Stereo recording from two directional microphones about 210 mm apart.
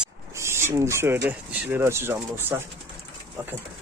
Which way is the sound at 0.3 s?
10° right (ahead or behind).